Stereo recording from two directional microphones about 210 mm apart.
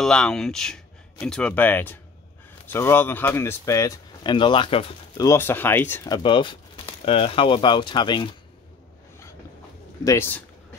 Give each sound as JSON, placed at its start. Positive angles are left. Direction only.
{"t": 0.0, "sound": "speech", "side_deg": 5}
{"t": 10.0, "sound": "speech", "side_deg": 10}